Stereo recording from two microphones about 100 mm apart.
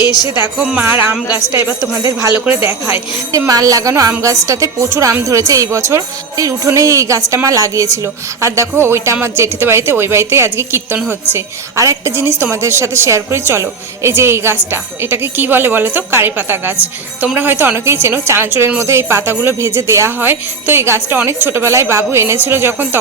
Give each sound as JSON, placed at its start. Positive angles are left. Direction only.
{"t": 0.8, "sound": "a woman's voice", "side_deg": -25}
{"t": 3.3, "sound": "a woman's voice", "side_deg": -35}